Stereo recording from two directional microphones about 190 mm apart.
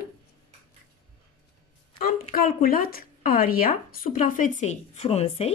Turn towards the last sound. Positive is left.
turn(degrees=30)  # may be behind; listen again after turning